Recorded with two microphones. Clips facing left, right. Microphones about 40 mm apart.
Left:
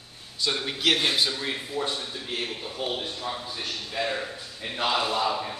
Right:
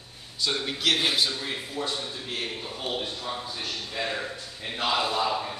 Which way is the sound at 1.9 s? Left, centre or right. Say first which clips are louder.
Left 1 dB; centre.